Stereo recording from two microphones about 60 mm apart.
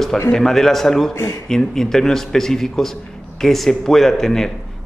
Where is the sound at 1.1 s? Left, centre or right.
Left.